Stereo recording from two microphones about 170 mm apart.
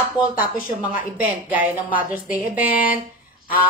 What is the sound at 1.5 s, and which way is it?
A woman's voice, 10° right (ahead or behind).